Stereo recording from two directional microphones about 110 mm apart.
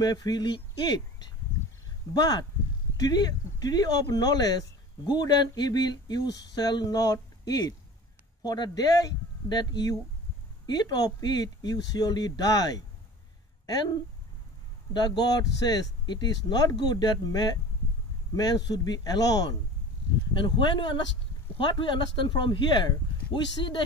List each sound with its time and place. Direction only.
0.0 s speech: 40° left (ahead or behind)
14.9 s speech: 40° left (ahead or behind)